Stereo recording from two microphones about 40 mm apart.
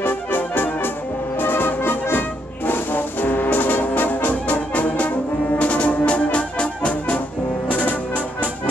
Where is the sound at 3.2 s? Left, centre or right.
Left.